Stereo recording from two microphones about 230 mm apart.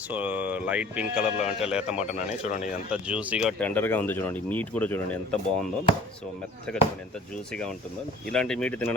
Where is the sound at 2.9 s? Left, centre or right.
Centre.